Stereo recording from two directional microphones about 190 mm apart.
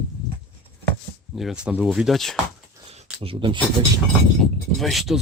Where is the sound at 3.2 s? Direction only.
30° right (ahead or behind).